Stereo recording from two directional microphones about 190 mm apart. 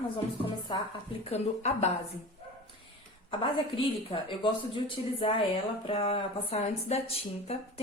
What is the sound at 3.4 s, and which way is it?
A woman's voice, 30° left (ahead or behind).